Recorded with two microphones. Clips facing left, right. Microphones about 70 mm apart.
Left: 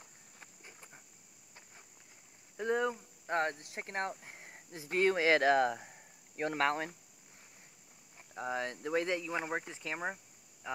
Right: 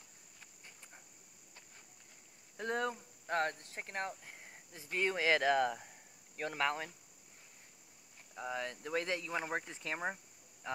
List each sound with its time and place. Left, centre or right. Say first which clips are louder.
2.5 s speech: left 4 dB; centre
3.3 s speech: left 2 dB; left
4.1 s a sound: left 3 dB; left
4.9 s speech: left 4 dB; left
6.3 s speech: left 4 dB; left
8.4 s speech: left 3 dB; left
8.8 s speech: left 4 dB; centre